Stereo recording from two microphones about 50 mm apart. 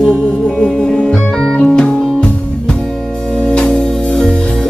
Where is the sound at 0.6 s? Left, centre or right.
Centre.